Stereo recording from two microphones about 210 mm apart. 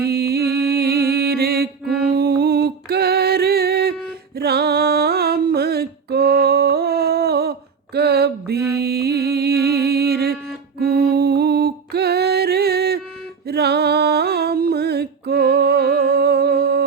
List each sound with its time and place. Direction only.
0.0 s mantra: 50° right (ahead or behind)
4.4 s music: 50° right (ahead or behind)